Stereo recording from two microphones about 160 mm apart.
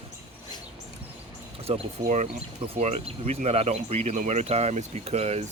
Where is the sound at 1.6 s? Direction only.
45° right (ahead or behind).